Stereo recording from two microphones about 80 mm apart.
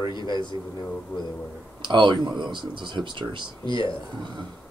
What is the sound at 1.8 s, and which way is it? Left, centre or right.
Speech, right.